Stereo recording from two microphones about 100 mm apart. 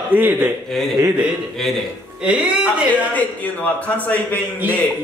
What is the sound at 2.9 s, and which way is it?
Speech, 15° left (ahead or behind).